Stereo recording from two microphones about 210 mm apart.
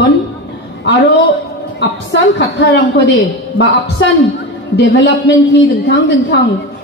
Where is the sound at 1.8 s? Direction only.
55° left (ahead or behind).